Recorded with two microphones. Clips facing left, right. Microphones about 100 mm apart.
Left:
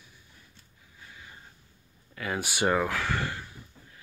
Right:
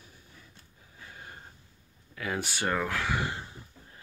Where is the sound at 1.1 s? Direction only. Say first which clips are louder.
Right 3 dB; 50° right (ahead or behind).